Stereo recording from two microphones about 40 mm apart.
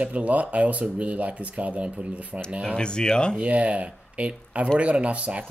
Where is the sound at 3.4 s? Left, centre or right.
Right.